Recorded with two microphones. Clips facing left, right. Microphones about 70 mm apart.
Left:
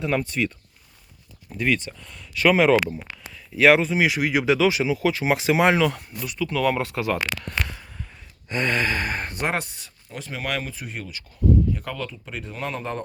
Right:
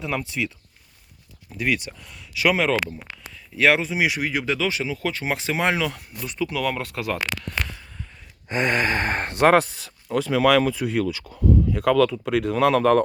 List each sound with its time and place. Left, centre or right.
0.0 s speech: centre
2.6 s speech: centre
3.3 s speech: centre
4.3 s speech: centre
7.4 s a sound: centre
8.4 s speech: right
9.3 s speech: right